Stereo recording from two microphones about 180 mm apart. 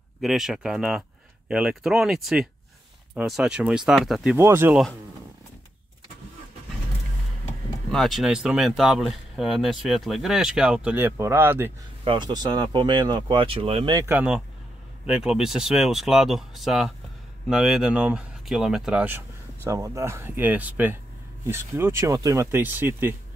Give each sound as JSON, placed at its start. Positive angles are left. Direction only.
{"t": 0.2, "sound": "speech", "side_deg": 0}
{"t": 4.4, "sound": "speech", "side_deg": -15}
{"t": 7.9, "sound": "speech", "side_deg": 0}
{"t": 12.0, "sound": "speech", "side_deg": -25}
{"t": 13.9, "sound": "speech", "side_deg": -10}